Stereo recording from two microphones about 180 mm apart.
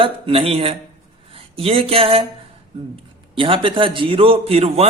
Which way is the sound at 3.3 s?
30° right (ahead or behind).